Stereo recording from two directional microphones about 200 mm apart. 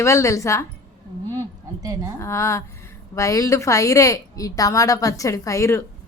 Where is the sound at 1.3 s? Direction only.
15° right (ahead or behind).